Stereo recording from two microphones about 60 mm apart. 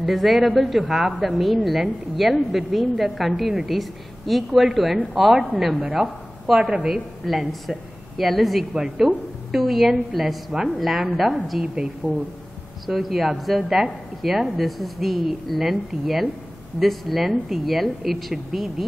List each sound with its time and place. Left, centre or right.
0.0 s a woman's voice: centre
6.7 s a woman's voice: centre
7.2 s a woman's voice: centre
12.0 s speech: centre
12.8 s a woman's voice: centre